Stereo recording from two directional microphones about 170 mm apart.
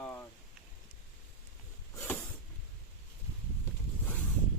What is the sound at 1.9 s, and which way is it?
Speech, 10° left (ahead or behind).